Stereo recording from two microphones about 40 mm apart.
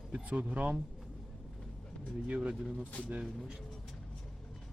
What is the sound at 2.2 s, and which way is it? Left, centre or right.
Speech, right.